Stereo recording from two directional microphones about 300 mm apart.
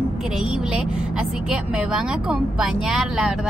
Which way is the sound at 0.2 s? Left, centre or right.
Centre.